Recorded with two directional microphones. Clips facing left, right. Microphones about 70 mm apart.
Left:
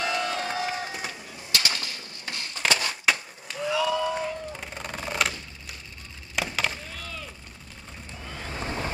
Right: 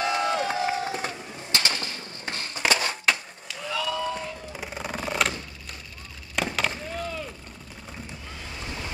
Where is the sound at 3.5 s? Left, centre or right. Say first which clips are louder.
Left 5 dB; left.